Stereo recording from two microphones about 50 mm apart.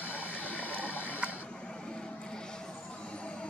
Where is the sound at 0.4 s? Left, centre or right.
Left.